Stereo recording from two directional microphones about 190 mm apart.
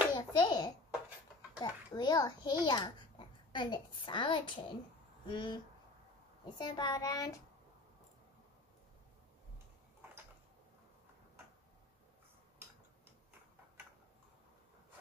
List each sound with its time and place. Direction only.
0.1 s a sound: 20° left (ahead or behind)
1.6 s a child's voice: 20° left (ahead or behind)
6.6 s a child's voice: 20° left (ahead or behind)